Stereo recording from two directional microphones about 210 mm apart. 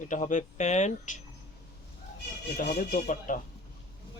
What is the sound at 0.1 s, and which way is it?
Speech, 35° left (ahead or behind).